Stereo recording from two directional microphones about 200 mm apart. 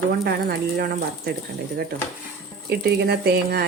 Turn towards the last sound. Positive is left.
turn(degrees=-50)  # may be behind; listen again after turning